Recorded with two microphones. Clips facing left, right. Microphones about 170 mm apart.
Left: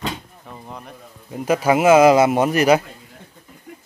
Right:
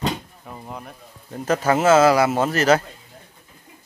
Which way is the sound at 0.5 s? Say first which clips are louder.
Right 1 dB; 5° right (ahead or behind).